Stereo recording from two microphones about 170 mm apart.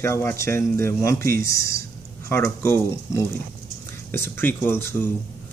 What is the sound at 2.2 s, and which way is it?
Speech, 15° left (ahead or behind).